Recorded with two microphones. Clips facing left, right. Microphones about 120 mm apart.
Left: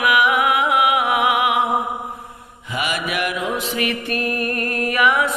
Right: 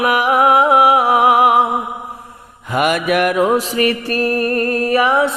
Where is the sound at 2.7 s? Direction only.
50° right (ahead or behind); by 5.3 s 30° right (ahead or behind).